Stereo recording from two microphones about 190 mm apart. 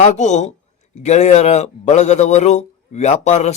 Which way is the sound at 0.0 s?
40° left (ahead or behind).